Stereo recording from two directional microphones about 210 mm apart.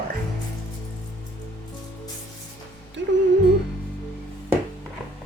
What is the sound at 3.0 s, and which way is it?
Music, 60° right (ahead or behind).